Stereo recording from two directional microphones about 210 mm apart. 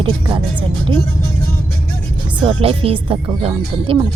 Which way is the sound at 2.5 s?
25° right (ahead or behind).